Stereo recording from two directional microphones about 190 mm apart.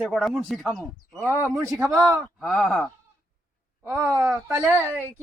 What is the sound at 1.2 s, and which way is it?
Speech, 15° right (ahead or behind).